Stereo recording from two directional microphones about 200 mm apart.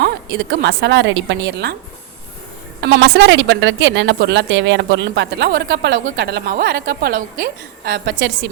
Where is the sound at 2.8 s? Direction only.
60° right (ahead or behind).